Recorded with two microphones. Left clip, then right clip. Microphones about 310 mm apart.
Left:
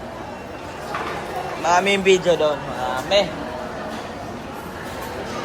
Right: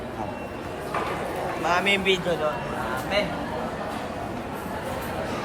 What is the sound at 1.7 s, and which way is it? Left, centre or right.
Speech, centre.